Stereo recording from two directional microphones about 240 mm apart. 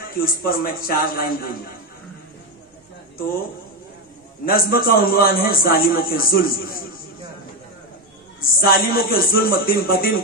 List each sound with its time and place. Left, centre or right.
0.2 s a man's voice: left
4.5 s a man's voice: left
8.4 s a man's voice: left